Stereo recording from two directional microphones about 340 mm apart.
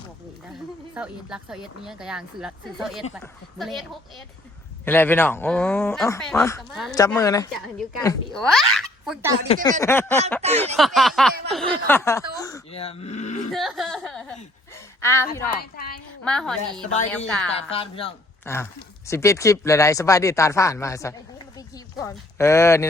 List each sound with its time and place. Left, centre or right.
0.9 s speech: centre
4.9 s speech: centre
13.5 s speech: centre
15.7 s a woman's voice: left
16.2 s speech: centre
17.7 s speech: centre